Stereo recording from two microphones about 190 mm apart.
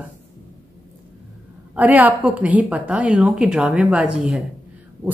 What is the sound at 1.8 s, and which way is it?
A woman's voice, 10° right (ahead or behind).